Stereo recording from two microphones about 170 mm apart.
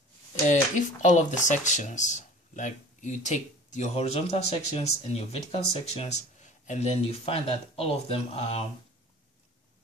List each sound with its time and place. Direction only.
0.5 s speech: 45° left (ahead or behind)